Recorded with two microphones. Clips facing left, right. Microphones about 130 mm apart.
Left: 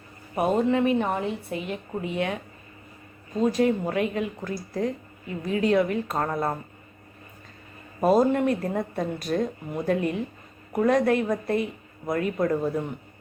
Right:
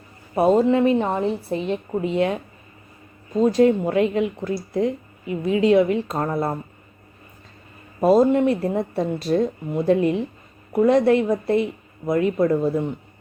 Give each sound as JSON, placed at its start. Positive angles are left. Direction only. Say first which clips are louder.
{"t": 0.3, "sound": "speech", "louder": "right 6 dB", "side_deg": -30}
{"t": 8.0, "sound": "speech", "louder": "right 4 dB", "side_deg": -25}